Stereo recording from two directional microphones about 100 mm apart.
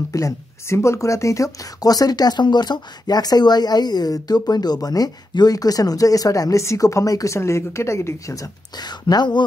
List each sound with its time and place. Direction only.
0.1 s speech: 30° left (ahead or behind); by 9.4 s 45° left (ahead or behind)